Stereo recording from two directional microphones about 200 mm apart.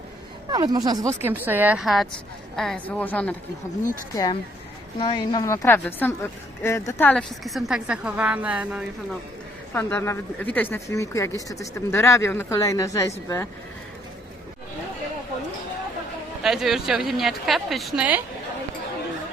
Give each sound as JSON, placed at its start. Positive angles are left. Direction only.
{"t": 0.5, "sound": "speech", "side_deg": -20}
{"t": 4.1, "sound": "a woman's voice", "side_deg": 20}
{"t": 5.6, "sound": "speech", "side_deg": 10}
{"t": 9.7, "sound": "speech", "side_deg": 10}
{"t": 16.4, "sound": "speech", "side_deg": 0}